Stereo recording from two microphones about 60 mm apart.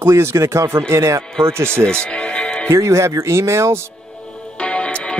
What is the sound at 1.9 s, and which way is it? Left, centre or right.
Music, centre.